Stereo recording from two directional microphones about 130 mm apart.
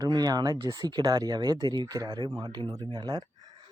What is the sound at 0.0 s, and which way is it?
Speech, 30° right (ahead or behind).